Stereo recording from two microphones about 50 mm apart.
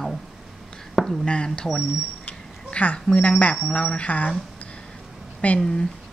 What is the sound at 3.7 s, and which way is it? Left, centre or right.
Speech, left.